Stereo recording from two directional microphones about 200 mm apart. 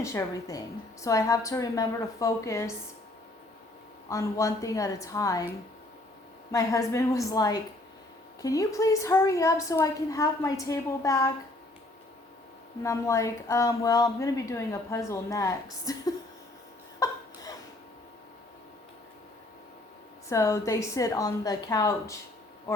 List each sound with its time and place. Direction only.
0.0 s a woman's voice: 15° left (ahead or behind)
4.1 s a woman's voice: 15° left (ahead or behind)
6.5 s a woman's voice: 15° left (ahead or behind)
12.8 s a woman's voice: 15° left (ahead or behind)
20.3 s a woman's voice: 15° left (ahead or behind)